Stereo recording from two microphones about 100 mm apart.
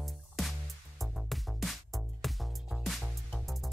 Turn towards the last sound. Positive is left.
turn(degrees=0)  # may be behind; listen again after turning